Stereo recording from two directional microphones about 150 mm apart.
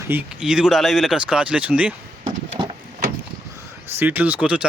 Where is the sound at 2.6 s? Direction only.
35° right (ahead or behind).